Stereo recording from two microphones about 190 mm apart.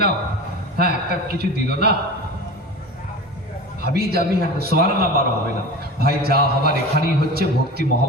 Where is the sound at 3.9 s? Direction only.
55° right (ahead or behind).